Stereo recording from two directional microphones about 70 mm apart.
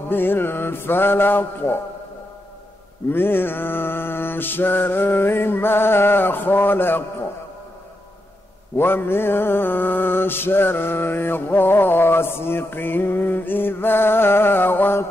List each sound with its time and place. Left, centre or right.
0.1 s mantra: left
3.1 s mantra: left
8.7 s mantra: left